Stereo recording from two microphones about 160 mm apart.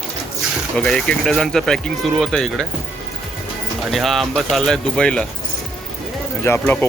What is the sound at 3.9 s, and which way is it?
Speech, centre (ahead or behind).